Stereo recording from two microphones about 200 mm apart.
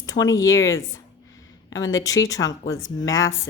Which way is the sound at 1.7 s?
70° left (ahead or behind).